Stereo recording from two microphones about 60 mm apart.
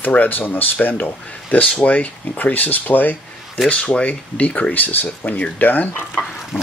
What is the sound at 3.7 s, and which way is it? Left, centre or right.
Speech, centre.